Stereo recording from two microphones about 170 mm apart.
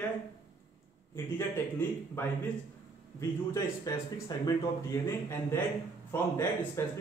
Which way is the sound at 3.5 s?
20° left (ahead or behind).